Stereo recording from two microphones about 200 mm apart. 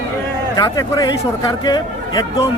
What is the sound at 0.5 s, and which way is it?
Speech, 20° left (ahead or behind).